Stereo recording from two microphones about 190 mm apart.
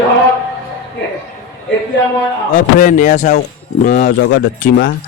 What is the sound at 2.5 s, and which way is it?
A man's voice, 40° left (ahead or behind).